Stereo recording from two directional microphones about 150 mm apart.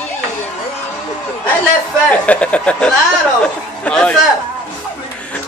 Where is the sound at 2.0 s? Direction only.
10° left (ahead or behind).